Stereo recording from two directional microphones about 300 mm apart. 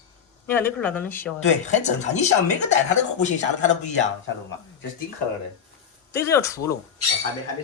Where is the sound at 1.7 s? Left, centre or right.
Left.